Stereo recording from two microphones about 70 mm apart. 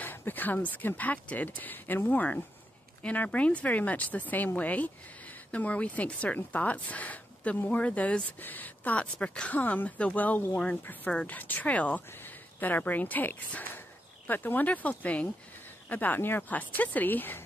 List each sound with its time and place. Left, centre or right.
0.0 s speech: left